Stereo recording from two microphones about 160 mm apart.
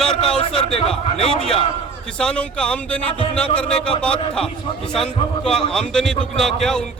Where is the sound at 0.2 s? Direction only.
35° left (ahead or behind).